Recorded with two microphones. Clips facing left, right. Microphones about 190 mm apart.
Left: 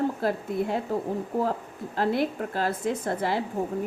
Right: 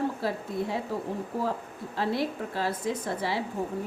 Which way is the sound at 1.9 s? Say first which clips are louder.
Left 3 dB; 50° left (ahead or behind).